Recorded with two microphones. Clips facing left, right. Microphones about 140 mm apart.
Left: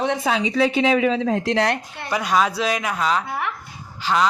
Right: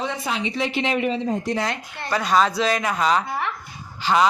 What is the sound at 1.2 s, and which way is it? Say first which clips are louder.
Speech: left 4 dB; 90° left.